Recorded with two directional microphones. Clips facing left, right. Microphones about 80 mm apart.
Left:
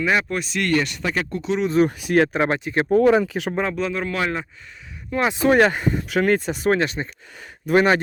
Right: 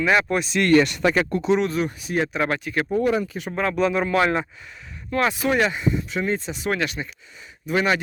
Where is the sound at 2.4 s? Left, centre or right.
Left.